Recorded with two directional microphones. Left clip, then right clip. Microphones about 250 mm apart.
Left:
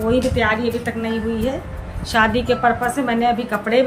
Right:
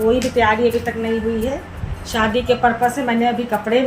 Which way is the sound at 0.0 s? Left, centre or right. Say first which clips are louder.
Right 2 dB; centre.